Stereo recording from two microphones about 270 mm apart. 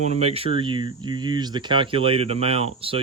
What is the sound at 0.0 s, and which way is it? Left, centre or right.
Speech, right.